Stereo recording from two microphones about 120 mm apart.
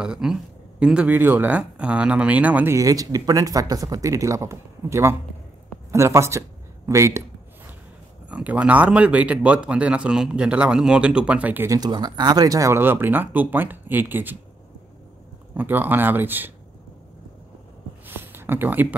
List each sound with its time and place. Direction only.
0.0 s speech: 5° right (ahead or behind)
2.7 s speech: 30° right (ahead or behind)
8.3 s speech: 10° right (ahead or behind)
11.6 s speech: 30° right (ahead or behind)
15.5 s speech: 15° right (ahead or behind)
18.0 s a sound: 20° right (ahead or behind)